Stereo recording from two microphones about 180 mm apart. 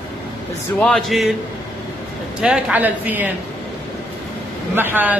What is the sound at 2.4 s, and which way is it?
Speech, 5° right (ahead or behind).